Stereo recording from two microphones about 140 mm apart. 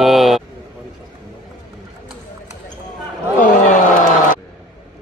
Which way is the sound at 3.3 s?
70° left (ahead or behind).